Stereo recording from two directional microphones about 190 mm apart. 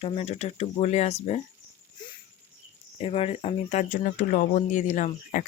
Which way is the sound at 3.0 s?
30° left (ahead or behind).